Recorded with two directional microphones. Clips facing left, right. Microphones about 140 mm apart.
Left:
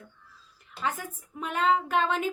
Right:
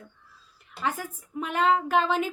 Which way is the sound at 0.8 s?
5° right (ahead or behind).